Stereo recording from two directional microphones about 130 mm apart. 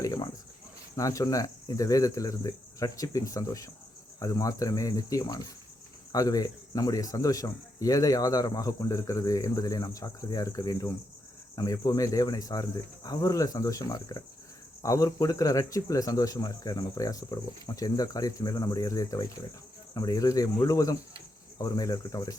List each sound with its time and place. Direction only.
0.0 s cricket: 30° left (ahead or behind)
0.9 s speech: 25° left (ahead or behind)